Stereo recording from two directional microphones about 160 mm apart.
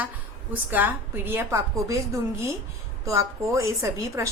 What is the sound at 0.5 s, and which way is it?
A woman's voice, 10° right (ahead or behind).